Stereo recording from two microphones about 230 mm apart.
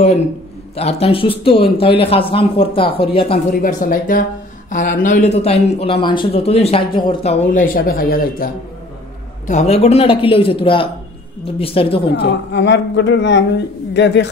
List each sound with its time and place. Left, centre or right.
0.7 s speech: left
3.6 s speech: left
7.5 s speech: left
9.5 s speech: left
12.2 s speech: left